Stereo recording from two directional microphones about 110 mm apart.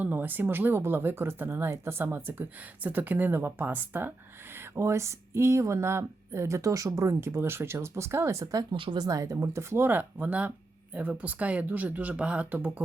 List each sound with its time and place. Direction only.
0.0 s speech: 15° right (ahead or behind)
8.7 s speech: 45° right (ahead or behind); by 12.8 s 15° right (ahead or behind)